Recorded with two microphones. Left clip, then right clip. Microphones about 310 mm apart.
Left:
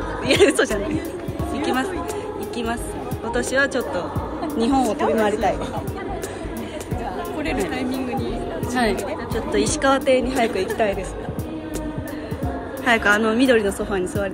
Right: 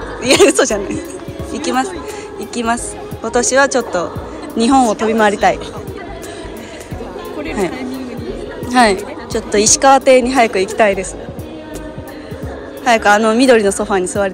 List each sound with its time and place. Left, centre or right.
0.2 s a woman's voice: centre
8.8 s a woman's voice: right
12.8 s a woman's voice: centre